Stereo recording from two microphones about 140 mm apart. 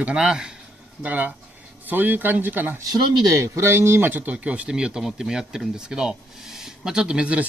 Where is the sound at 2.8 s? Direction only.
25° right (ahead or behind).